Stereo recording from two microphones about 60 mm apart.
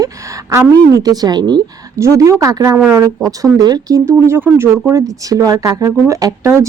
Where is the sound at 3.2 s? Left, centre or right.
Right.